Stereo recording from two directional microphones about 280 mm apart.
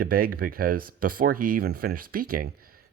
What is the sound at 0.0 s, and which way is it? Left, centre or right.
Speech, right.